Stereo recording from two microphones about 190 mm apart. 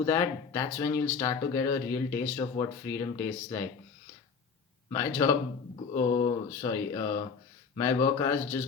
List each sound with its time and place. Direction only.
0.0 s speech: 15° left (ahead or behind)
4.9 s speech: 15° left (ahead or behind)